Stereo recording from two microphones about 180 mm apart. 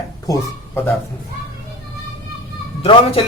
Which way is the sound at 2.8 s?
35° left (ahead or behind).